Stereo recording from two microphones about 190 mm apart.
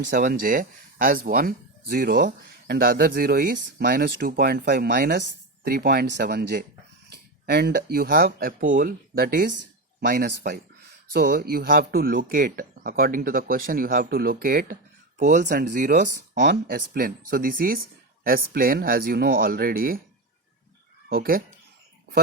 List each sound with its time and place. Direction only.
0.1 s speech: 45° right (ahead or behind)
16.4 s speech: 60° right (ahead or behind)
21.1 s speech: 50° right (ahead or behind)